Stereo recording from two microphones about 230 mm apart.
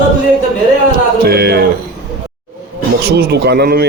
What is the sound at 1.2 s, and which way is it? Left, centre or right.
Speech, right.